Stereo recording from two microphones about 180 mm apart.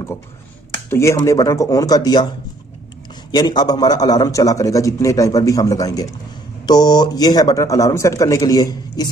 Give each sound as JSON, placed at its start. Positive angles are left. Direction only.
{"t": 0.8, "sound": "a man's voice", "side_deg": 15}
{"t": 3.3, "sound": "a man's voice", "side_deg": 25}